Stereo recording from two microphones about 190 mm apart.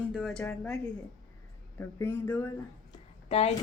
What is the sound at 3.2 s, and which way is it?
Speech, 30° left (ahead or behind).